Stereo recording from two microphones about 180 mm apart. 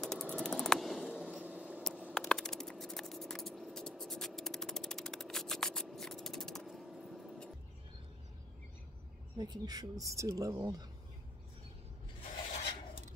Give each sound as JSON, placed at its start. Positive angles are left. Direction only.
{"t": 0.0, "sound": "mechanisms", "side_deg": 0}
{"t": 2.0, "sound": "a sound", "side_deg": -5}
{"t": 9.4, "sound": "speech", "side_deg": -20}